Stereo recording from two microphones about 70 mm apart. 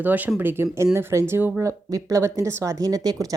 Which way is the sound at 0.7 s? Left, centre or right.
Right.